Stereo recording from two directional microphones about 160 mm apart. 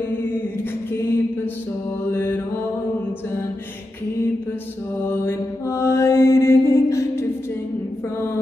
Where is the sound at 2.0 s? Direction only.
15° left (ahead or behind).